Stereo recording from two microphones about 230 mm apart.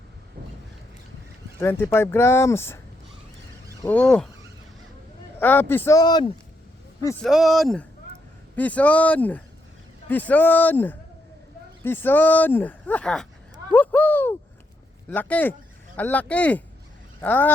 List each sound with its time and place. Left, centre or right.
1.5 s speech: centre
5.4 s speech: centre
7.3 s speech: centre
13.7 s a sound: centre
15.1 s speech: centre